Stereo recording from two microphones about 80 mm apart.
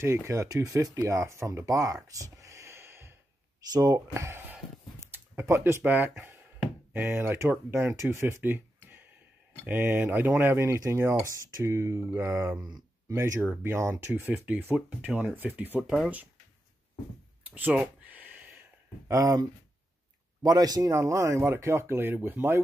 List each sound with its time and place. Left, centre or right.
0.0 s speech: right
2.0 s a sound: right
3.7 s speech: right
17.6 s a sound: centre
19.0 s a man's voice: right
20.4 s a man's voice: right
20.9 s speech: right